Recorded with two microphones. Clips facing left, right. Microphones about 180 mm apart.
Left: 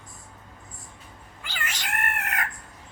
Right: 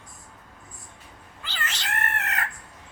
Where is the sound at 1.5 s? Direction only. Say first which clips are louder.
Even; 10° left (ahead or behind).